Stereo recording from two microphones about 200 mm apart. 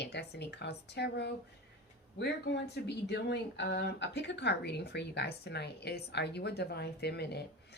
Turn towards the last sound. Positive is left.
turn(degrees=55)  # may be behind; listen again after turning